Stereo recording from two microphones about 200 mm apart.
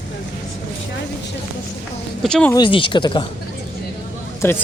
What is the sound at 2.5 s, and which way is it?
Speech, 25° left (ahead or behind).